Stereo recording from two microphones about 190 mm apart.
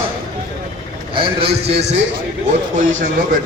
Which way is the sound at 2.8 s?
40° right (ahead or behind).